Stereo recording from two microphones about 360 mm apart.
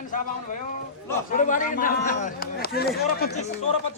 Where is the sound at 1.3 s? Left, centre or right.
Left.